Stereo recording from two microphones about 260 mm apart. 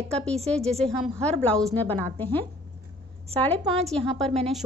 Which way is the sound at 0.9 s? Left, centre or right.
Centre.